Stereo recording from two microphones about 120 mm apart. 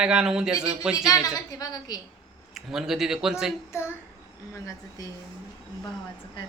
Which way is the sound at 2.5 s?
5° right (ahead or behind).